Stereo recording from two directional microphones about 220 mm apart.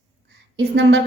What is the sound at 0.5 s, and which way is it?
Speech, 55° right (ahead or behind).